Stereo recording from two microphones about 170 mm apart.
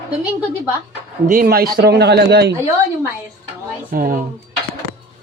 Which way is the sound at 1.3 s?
60° right (ahead or behind).